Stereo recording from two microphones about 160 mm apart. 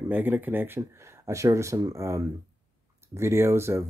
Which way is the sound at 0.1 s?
10° right (ahead or behind).